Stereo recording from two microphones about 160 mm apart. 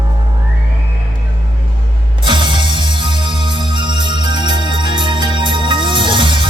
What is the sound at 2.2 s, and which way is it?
Music, 30° right (ahead or behind).